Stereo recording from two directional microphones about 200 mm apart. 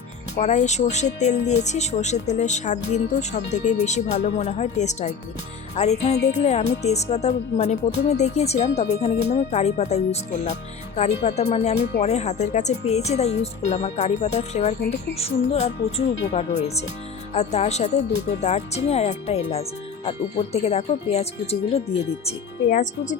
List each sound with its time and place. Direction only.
0.3 s speech: 35° left (ahead or behind)